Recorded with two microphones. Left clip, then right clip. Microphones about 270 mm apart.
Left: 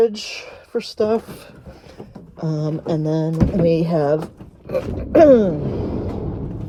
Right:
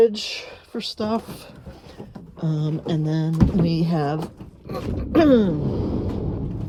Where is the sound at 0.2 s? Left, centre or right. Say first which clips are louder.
Even; centre.